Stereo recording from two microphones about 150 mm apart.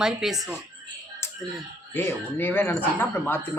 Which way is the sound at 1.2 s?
15° left (ahead or behind).